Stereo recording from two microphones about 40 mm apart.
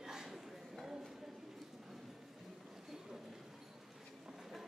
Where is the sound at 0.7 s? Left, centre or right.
Centre.